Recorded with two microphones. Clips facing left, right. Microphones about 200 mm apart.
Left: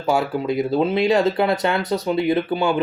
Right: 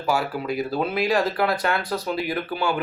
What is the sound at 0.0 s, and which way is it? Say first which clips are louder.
Speech: left 4 dB; 25° left (ahead or behind).